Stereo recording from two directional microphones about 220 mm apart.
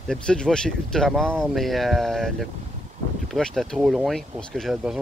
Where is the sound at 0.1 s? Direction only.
5° left (ahead or behind).